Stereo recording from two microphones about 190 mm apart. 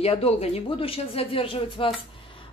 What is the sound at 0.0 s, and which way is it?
A man's voice, 30° left (ahead or behind).